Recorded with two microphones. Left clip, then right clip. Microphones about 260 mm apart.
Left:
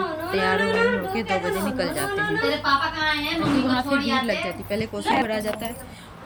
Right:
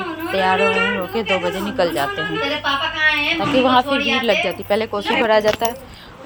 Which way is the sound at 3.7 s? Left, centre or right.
Centre.